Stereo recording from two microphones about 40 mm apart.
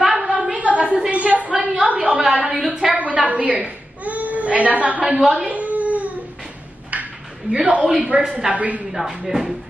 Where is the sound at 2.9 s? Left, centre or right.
Right.